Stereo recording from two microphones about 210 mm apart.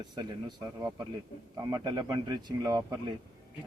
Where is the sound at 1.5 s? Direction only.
20° right (ahead or behind).